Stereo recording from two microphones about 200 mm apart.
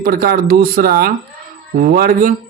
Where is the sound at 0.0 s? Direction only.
45° right (ahead or behind).